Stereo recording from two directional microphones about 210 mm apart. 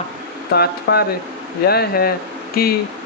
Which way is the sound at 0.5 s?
50° left (ahead or behind).